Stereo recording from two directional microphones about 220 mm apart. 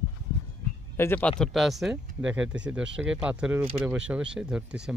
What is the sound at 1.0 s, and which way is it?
Speech, 10° left (ahead or behind).